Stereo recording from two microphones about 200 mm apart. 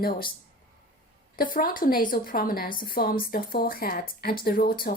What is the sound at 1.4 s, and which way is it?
A woman's voice, 45° left (ahead or behind).